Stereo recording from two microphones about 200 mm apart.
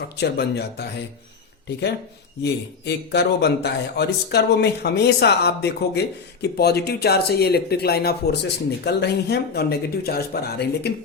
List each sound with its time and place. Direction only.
0.2 s a man's voice: 55° left (ahead or behind)
2.4 s a man's voice: 55° left (ahead or behind)